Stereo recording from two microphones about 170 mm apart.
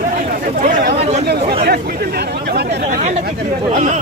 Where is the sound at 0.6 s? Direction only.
45° right (ahead or behind).